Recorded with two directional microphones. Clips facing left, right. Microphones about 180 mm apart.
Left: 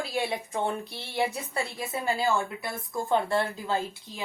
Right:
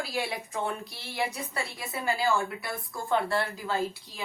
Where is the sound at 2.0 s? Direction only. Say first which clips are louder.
Even; 20° left (ahead or behind).